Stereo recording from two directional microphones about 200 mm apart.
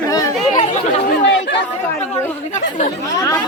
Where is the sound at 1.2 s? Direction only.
60° left (ahead or behind).